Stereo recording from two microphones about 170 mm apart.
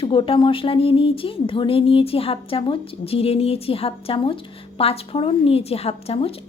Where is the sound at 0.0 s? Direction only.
30° left (ahead or behind).